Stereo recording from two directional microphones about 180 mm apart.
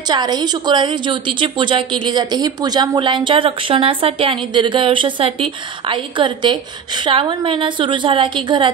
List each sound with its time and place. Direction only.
0.1 s a woman's voice: 25° right (ahead or behind)